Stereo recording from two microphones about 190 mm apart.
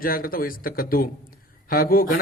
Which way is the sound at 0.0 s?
50° left (ahead or behind).